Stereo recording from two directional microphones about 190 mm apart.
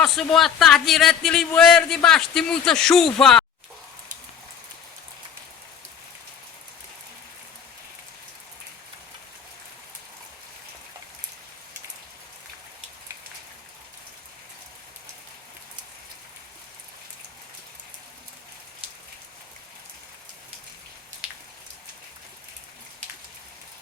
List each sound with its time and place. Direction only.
0.0 s a man's voice: centre (ahead or behind)